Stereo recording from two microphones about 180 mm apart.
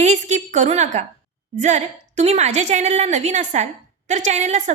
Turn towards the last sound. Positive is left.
turn(degrees=-40)  # may be behind; listen again after turning